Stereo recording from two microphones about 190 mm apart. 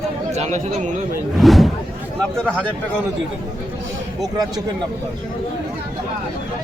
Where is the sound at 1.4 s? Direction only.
Centre (ahead or behind).